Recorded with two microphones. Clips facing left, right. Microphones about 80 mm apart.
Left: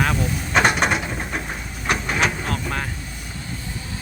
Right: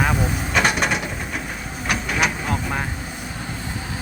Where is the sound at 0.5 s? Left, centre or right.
Left.